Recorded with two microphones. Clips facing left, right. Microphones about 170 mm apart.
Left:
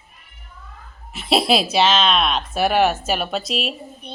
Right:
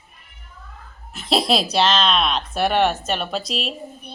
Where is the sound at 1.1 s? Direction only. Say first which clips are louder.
Left 2 dB; 5° left (ahead or behind).